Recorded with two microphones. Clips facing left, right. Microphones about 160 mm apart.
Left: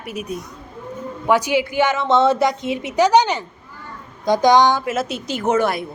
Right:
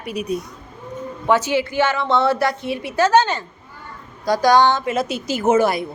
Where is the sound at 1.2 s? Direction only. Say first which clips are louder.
Left 1 dB; 15° left (ahead or behind).